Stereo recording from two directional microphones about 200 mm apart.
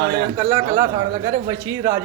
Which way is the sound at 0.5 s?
20° right (ahead or behind).